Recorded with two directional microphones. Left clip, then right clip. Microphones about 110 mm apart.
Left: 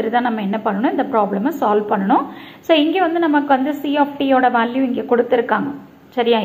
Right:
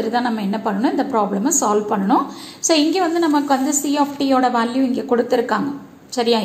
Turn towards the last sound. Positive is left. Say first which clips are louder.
# left 2 dB
turn(degrees=-30)  # may be behind; listen again after turning